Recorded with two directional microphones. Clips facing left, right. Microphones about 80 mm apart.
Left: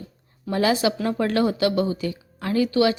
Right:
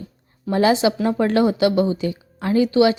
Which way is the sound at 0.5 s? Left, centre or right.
Right.